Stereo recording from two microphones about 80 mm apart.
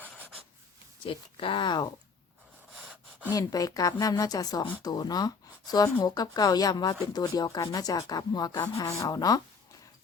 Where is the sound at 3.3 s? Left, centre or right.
Left.